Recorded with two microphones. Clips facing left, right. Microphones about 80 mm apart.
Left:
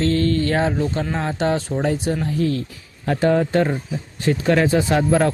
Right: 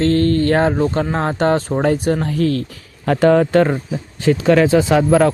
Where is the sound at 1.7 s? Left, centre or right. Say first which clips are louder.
Right 5 dB; right.